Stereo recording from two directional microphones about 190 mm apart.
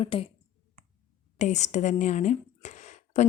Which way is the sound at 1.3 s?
35° left (ahead or behind).